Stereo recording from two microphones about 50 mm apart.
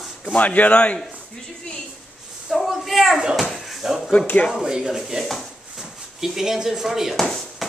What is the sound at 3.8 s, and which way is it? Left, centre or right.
Speech, centre.